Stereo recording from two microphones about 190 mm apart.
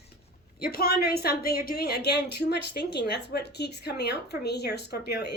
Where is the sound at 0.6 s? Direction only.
55° left (ahead or behind).